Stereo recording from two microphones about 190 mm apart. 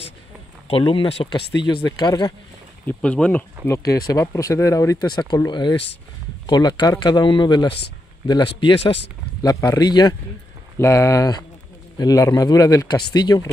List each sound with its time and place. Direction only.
0.7 s speech: 30° left (ahead or behind)
2.9 s speech: 5° left (ahead or behind)